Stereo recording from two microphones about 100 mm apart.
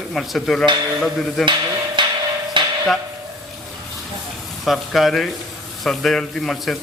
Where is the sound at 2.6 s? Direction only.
55° right (ahead or behind).